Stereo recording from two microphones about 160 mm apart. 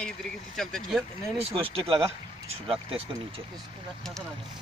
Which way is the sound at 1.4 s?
35° right (ahead or behind).